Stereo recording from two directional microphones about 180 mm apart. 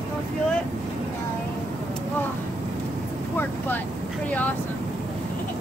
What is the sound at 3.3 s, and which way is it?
Speech, 10° left (ahead or behind).